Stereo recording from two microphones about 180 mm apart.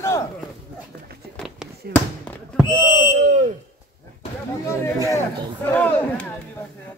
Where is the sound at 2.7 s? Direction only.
25° left (ahead or behind).